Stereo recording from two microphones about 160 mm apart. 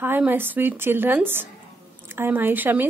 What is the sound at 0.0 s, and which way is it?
A woman's voice, 10° right (ahead or behind).